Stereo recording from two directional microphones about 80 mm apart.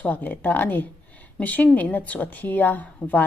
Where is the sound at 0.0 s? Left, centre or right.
Left.